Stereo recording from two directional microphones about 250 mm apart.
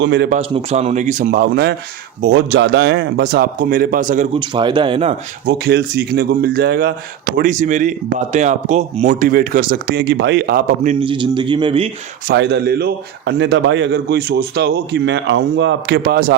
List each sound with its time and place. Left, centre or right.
0.0 s a man's voice: right
0.3 s a man's voice: right
4.4 s a man's voice: centre
5.5 s speech: right
11.0 s a man's voice: centre
12.3 s a man's voice: right